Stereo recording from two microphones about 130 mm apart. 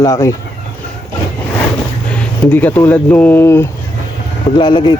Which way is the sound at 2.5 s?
15° left (ahead or behind).